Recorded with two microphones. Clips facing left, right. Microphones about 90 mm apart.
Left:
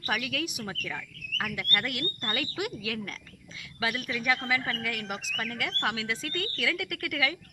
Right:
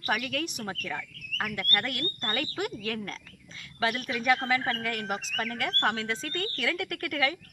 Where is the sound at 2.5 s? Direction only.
35° right (ahead or behind).